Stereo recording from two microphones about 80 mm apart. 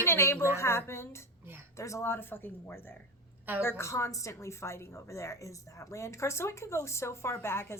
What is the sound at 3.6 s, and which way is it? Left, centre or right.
A woman's voice, left.